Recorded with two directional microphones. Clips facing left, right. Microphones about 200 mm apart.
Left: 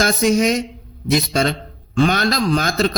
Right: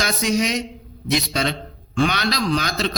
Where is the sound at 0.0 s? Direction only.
50° left (ahead or behind).